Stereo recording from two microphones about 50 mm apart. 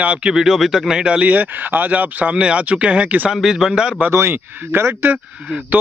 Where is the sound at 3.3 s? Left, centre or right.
Centre.